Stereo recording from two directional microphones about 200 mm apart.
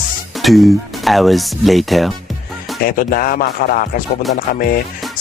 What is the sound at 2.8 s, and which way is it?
Speech, 45° left (ahead or behind).